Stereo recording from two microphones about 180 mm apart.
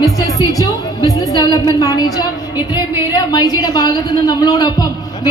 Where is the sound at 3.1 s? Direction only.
20° left (ahead or behind).